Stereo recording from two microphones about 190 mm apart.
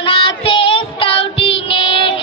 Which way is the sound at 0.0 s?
25° left (ahead or behind).